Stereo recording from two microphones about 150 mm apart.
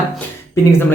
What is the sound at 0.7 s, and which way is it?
Speech, 15° left (ahead or behind).